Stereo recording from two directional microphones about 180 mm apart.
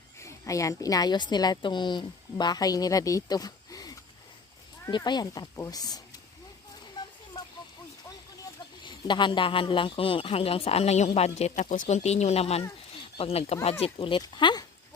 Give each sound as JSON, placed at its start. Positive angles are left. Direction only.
{"t": 0.2, "sound": "a woman's voice", "side_deg": 15}
{"t": 8.8, "sound": "a man's voice", "side_deg": 25}